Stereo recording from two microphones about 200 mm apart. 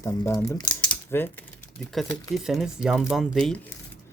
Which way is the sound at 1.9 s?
Centre (ahead or behind).